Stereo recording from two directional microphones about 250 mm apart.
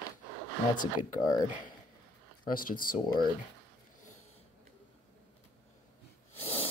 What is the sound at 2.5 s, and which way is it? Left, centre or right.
Speech, left.